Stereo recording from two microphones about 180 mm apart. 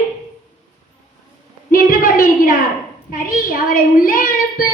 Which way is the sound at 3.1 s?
55° left (ahead or behind).